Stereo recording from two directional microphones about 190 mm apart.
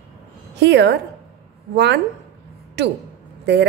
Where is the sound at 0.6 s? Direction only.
65° right (ahead or behind).